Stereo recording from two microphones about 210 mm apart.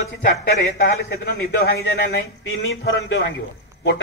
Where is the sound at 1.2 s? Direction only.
45° left (ahead or behind).